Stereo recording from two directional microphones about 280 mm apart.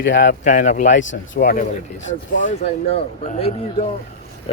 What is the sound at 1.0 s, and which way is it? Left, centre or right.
Speech, left.